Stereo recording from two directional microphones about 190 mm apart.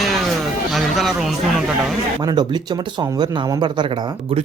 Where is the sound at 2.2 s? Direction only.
20° right (ahead or behind).